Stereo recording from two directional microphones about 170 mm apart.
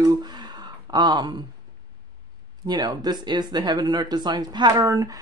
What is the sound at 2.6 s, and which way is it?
Speech, 20° right (ahead or behind).